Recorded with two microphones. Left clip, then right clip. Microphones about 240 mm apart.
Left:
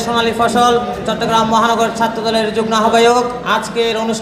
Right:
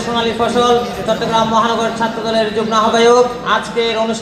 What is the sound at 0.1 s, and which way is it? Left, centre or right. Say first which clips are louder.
A man's voice: left 1 dB; left.